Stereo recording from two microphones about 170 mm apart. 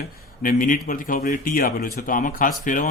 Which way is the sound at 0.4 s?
55° left (ahead or behind).